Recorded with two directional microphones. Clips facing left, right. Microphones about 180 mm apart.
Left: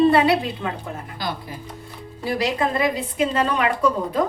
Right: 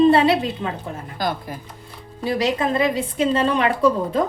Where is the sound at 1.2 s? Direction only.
45° right (ahead or behind).